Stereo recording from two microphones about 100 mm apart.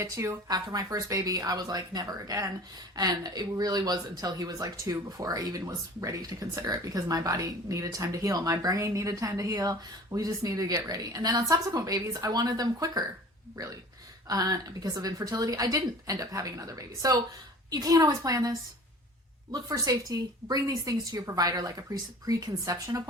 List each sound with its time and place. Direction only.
0.0 s speech: 30° right (ahead or behind)
14.3 s speech: 40° right (ahead or behind)